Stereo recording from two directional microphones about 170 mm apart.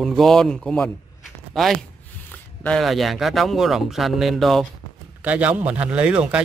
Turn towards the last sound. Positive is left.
turn(degrees=-5)  # may be behind; listen again after turning